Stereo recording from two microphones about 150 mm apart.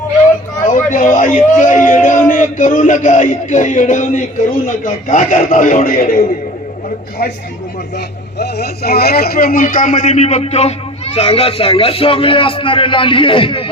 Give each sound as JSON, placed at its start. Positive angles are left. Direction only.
{"t": 0.9, "sound": "speech", "side_deg": 60}
{"t": 7.9, "sound": "speech", "side_deg": 90}